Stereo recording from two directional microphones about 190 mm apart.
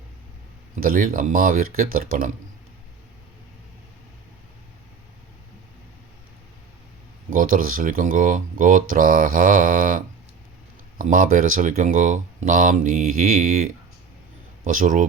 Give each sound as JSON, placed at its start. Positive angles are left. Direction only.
{"t": 0.8, "sound": "speech", "side_deg": -50}
{"t": 7.3, "sound": "speech", "side_deg": -45}